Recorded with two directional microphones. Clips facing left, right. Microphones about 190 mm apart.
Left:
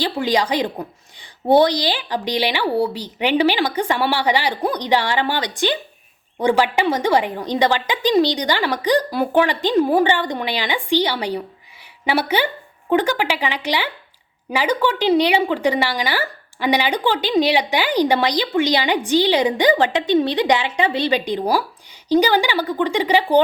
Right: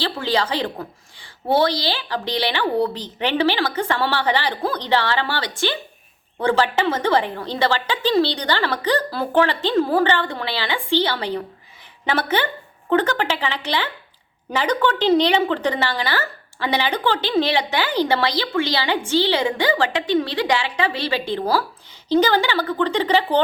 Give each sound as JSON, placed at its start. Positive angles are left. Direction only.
{"t": 0.0, "sound": "a woman's voice", "side_deg": 15}